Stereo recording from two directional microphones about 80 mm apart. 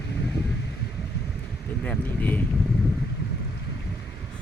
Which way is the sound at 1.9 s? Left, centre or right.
Left.